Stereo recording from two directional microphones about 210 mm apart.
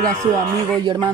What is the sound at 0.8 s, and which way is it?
Speech, 20° right (ahead or behind).